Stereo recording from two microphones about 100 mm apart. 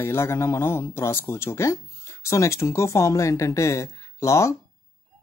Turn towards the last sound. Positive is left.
turn(degrees=30)  # may be behind; listen again after turning